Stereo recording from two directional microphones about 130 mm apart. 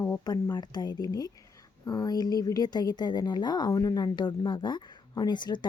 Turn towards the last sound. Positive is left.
turn(degrees=35)  # may be behind; listen again after turning